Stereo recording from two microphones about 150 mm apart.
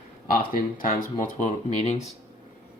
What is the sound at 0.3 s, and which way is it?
Speech, 70° left (ahead or behind).